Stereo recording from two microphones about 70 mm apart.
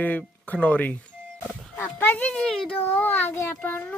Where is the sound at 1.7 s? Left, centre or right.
Left.